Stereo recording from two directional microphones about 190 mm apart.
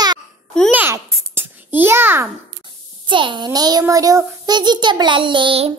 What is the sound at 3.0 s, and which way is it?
A child's voice, 25° right (ahead or behind).